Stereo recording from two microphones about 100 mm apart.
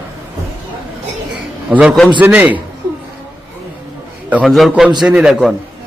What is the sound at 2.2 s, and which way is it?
Speech, 15° right (ahead or behind).